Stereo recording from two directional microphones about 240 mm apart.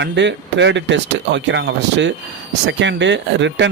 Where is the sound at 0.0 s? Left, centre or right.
Right.